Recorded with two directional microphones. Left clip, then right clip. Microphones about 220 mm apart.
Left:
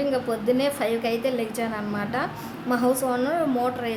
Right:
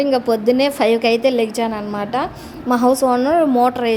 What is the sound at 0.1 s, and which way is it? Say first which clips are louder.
A woman's voice: right 8 dB; 30° right (ahead or behind).